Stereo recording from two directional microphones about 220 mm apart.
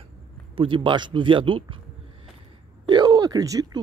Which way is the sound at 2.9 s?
20° right (ahead or behind).